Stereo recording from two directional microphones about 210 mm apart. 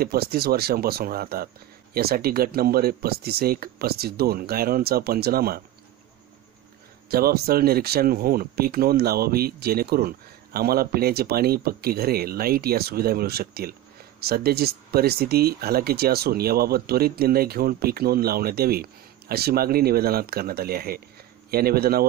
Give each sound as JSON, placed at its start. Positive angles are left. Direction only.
{"t": 0.0, "sound": "speech", "side_deg": -45}
{"t": 7.1, "sound": "speech", "side_deg": -45}